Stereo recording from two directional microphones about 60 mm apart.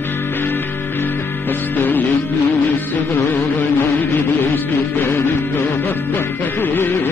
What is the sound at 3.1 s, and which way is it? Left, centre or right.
Music, left.